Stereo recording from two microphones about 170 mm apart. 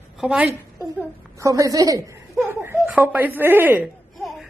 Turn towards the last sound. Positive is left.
turn(degrees=0)  # may be behind; listen again after turning